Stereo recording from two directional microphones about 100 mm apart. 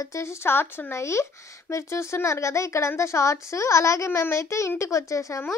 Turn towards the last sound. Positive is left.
turn(degrees=30)  # may be behind; listen again after turning